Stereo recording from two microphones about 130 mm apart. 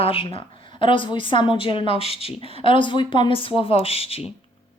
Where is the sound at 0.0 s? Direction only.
45° left (ahead or behind).